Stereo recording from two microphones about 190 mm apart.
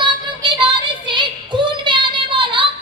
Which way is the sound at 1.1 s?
25° right (ahead or behind).